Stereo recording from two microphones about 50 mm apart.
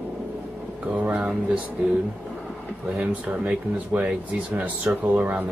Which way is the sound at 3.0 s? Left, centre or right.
Right.